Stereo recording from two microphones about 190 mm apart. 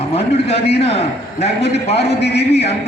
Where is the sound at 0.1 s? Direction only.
30° left (ahead or behind).